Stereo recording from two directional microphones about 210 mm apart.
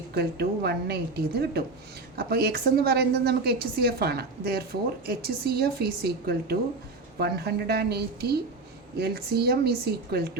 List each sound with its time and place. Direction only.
0.1 s a woman's voice: 50° right (ahead or behind)